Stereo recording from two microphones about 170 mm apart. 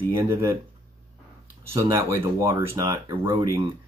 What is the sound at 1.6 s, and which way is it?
Speech, 15° right (ahead or behind).